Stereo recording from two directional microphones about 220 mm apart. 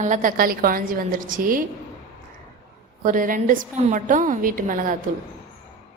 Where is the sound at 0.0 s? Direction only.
35° right (ahead or behind).